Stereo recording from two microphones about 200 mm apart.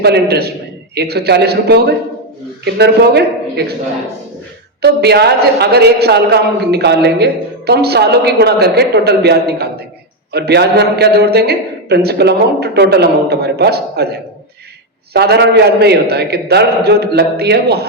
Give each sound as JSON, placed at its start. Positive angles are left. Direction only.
{"t": 0.0, "sound": "a man's voice", "side_deg": -55}
{"t": 4.8, "sound": "a man's voice", "side_deg": -55}
{"t": 15.1, "sound": "a man's voice", "side_deg": -55}